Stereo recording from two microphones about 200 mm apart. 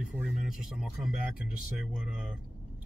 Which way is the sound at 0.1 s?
Centre (ahead or behind).